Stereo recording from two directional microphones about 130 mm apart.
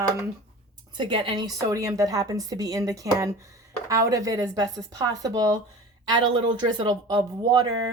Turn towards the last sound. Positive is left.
turn(degrees=-35)  # may be behind; listen again after turning